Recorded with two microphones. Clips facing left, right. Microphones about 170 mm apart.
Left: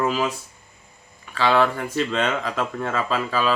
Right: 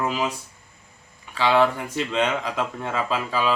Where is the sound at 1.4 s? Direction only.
15° right (ahead or behind).